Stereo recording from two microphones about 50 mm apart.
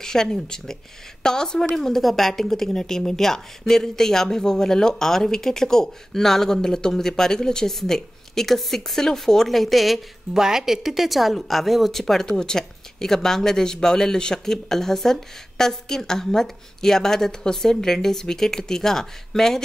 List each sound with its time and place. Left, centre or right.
0.0 s speech: centre